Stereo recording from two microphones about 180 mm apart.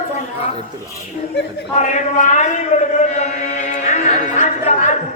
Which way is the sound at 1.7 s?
40° left (ahead or behind).